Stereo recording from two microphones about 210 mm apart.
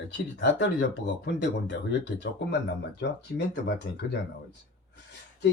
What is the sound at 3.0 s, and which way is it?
Speech, 55° left (ahead or behind).